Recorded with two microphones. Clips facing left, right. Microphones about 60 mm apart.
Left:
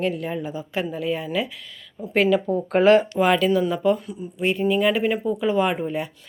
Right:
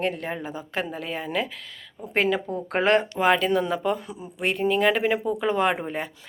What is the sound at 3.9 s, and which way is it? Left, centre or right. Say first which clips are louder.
Speech: left 3 dB; right.